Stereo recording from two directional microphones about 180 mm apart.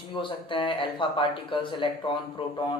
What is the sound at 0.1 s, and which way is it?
Speech, 30° left (ahead or behind).